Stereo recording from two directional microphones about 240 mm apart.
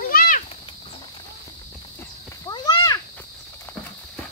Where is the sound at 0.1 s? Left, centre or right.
Left.